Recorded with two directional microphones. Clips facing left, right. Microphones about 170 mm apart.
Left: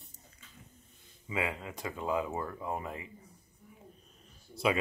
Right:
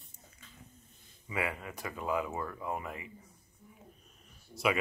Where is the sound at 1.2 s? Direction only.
20° left (ahead or behind).